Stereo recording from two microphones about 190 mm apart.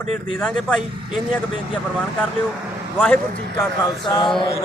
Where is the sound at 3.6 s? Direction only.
20° left (ahead or behind).